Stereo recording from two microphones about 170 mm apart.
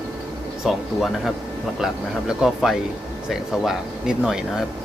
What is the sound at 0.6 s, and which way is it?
Speech, centre (ahead or behind).